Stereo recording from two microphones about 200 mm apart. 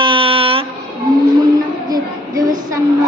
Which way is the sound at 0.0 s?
25° right (ahead or behind).